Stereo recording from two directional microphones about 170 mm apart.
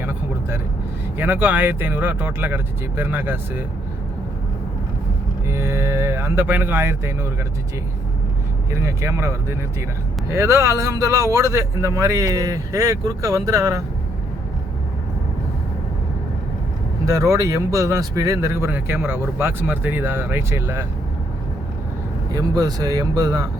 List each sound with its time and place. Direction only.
0.0 s vehicle: 10° right (ahead or behind)
1.2 s speech: 10° right (ahead or behind)
5.5 s speech: 15° right (ahead or behind)
8.7 s speech: 15° right (ahead or behind)
17.1 s speech: 20° right (ahead or behind)
22.3 s speech: 20° right (ahead or behind)